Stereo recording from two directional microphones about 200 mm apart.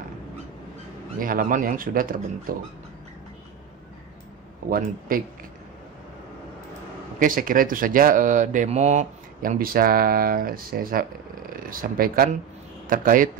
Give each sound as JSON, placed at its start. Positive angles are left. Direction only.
{"t": 1.2, "sound": "speech", "side_deg": -40}
{"t": 4.6, "sound": "speech", "side_deg": -45}
{"t": 7.2, "sound": "speech", "side_deg": -45}